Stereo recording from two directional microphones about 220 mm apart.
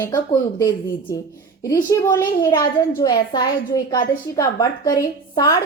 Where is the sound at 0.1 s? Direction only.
15° left (ahead or behind).